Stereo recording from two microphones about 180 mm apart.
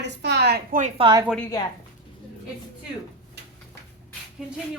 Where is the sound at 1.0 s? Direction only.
25° right (ahead or behind).